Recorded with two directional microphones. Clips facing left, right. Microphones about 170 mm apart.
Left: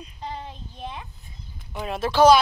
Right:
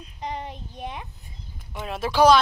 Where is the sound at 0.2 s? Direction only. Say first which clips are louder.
Right 3 dB; 15° right (ahead or behind).